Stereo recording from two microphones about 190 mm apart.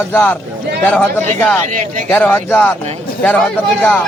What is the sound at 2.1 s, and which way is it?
A man's voice, 10° left (ahead or behind).